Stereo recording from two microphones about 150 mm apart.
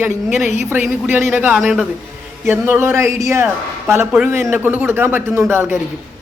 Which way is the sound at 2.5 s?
15° right (ahead or behind).